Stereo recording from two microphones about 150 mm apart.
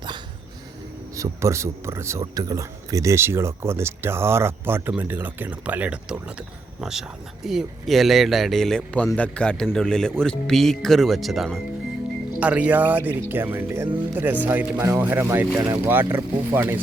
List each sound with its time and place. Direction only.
1.1 s a man's voice: 20° right (ahead or behind)
7.4 s a man's voice: centre (ahead or behind)